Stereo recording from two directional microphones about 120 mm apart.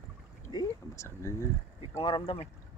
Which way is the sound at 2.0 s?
50° left (ahead or behind).